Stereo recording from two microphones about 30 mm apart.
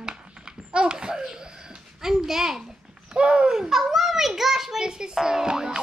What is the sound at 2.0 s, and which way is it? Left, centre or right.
Speech, centre.